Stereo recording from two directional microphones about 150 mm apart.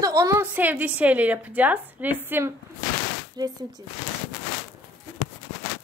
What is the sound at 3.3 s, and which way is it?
Speech, 25° right (ahead or behind).